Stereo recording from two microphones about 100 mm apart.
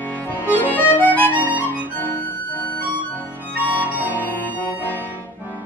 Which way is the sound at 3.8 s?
15° right (ahead or behind).